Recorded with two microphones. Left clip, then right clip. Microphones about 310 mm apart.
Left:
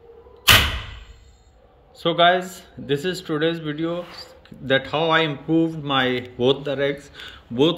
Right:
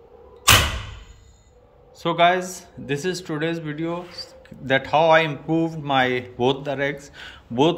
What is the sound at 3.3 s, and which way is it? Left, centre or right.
Speech, right.